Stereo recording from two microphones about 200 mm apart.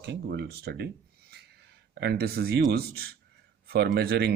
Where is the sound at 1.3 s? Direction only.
55° right (ahead or behind).